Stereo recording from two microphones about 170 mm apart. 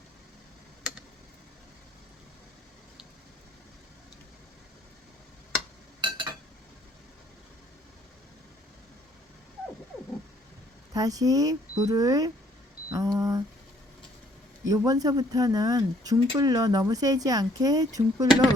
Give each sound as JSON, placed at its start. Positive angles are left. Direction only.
{"t": 6.0, "sound": "a sound", "side_deg": -30}
{"t": 10.9, "sound": "speech", "side_deg": -20}
{"t": 14.7, "sound": "speech", "side_deg": -20}